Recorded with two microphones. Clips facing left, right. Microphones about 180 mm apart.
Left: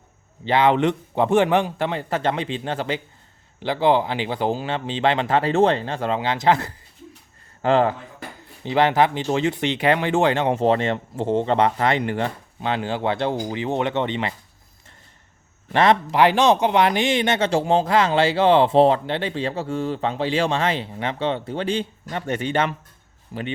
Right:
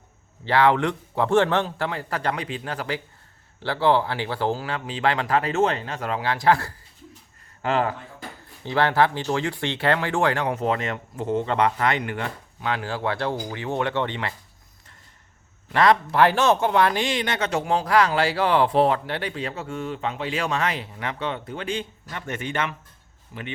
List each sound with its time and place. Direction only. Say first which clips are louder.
0.4 s speech: left 2 dB; 20° left (ahead or behind)
8.6 s speech: left 3 dB; 20° left (ahead or behind)
15.7 s speech: left 1 dB; 25° left (ahead or behind)
23.3 s speech: left 7 dB; 45° left (ahead or behind)